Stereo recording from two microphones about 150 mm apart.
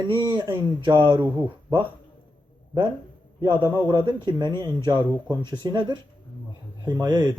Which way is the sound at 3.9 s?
30° right (ahead or behind).